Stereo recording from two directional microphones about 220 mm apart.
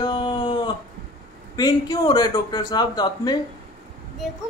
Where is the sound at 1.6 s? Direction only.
20° left (ahead or behind).